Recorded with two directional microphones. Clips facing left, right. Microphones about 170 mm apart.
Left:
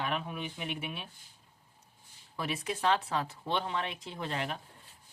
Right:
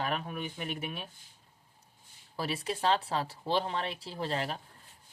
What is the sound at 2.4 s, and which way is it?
Speech, 30° right (ahead or behind).